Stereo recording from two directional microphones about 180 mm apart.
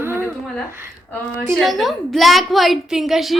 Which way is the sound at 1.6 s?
Centre (ahead or behind).